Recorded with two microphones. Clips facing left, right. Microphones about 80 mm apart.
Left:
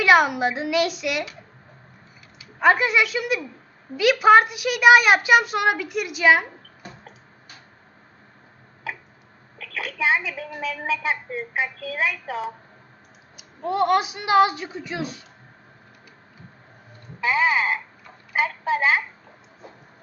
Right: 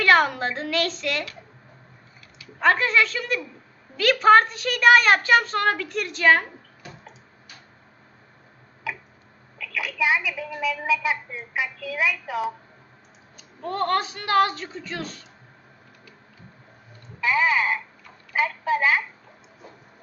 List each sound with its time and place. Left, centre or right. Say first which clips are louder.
0.0 s a child's voice: left 2 dB; centre
2.4 s a child's voice: left 2 dB; centre
9.6 s a sound: right 1 dB; left
10.6 s a woman's voice: right 2 dB; left
13.3 s a child's voice: left 5 dB; centre
17.2 s a woman's voice: left 1 dB; left